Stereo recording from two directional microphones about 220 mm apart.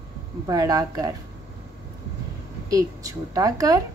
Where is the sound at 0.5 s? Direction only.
15° right (ahead or behind).